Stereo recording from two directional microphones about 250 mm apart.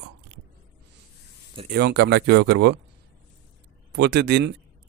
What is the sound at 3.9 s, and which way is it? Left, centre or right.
Speech, right.